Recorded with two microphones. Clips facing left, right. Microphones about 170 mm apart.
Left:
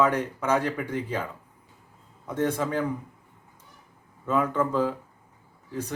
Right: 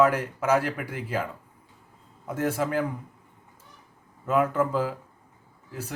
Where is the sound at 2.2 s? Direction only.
10° right (ahead or behind).